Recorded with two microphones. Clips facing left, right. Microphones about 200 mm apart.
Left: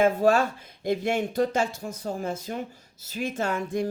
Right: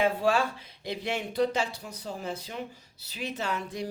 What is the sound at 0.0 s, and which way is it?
Speech, 45° left (ahead or behind).